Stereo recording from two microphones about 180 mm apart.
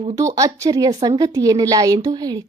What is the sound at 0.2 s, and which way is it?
A woman's voice, 20° right (ahead or behind).